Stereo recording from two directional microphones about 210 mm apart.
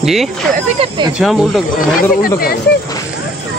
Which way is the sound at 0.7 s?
20° right (ahead or behind).